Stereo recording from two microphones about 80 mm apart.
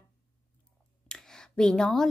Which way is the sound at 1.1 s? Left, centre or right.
Centre.